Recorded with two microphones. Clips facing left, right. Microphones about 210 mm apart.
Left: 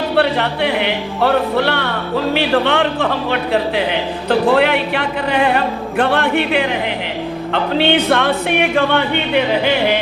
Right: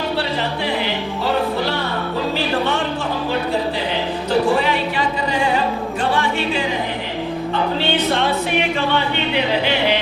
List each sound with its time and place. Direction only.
0.2 s music: 65° left (ahead or behind)